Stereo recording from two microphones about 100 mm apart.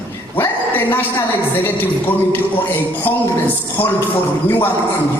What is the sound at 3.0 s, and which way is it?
Speech, 20° left (ahead or behind).